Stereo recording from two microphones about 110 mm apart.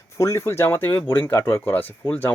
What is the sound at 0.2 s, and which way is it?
Speech, 25° left (ahead or behind).